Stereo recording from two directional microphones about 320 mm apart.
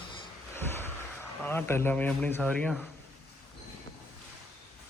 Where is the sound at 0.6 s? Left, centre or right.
Centre.